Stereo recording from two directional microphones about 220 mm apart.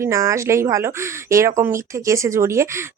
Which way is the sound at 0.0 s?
15° right (ahead or behind).